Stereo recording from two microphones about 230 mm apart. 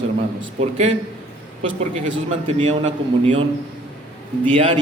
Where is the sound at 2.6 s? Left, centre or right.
Right.